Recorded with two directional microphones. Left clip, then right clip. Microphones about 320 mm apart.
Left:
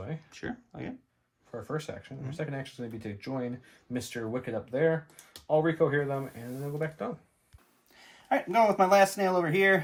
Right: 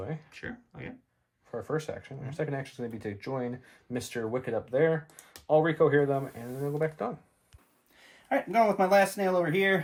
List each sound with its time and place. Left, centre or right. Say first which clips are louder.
0.3 s speech: left 2 dB; centre
1.5 s speech: right 3 dB; centre
8.3 s speech: left 1 dB; centre